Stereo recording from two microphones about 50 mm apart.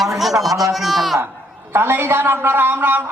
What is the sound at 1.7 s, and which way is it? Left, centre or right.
A man's voice, right.